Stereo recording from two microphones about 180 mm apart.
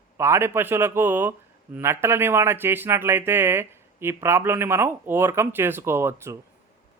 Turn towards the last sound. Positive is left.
turn(degrees=-15)  # may be behind; listen again after turning